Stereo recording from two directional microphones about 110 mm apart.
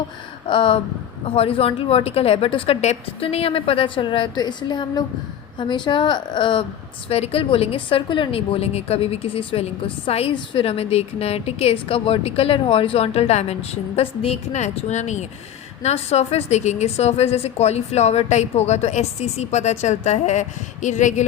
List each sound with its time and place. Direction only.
0.4 s a woman's voice: 50° left (ahead or behind)
7.1 s a woman's voice: 65° left (ahead or behind); by 15.3 s 90° left
15.8 s a woman's voice: 75° left (ahead or behind)